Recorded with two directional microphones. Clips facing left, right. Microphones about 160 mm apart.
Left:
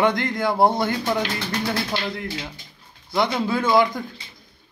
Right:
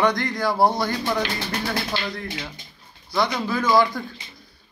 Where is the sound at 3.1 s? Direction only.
20° left (ahead or behind).